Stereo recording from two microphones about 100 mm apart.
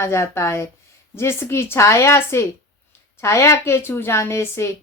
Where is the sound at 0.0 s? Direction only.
25° left (ahead or behind).